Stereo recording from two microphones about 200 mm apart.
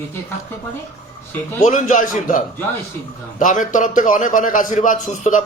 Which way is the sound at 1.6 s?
40° left (ahead or behind).